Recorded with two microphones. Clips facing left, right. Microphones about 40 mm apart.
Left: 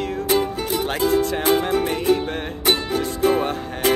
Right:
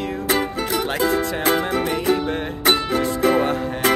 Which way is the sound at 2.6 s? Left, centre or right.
Right.